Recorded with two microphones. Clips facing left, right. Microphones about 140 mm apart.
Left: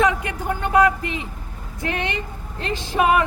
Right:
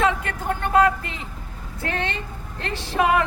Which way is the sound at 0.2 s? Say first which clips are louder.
Left 1 dB; 15° left (ahead or behind).